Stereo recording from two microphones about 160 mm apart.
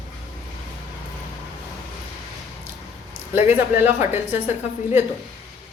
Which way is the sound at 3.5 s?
15° right (ahead or behind).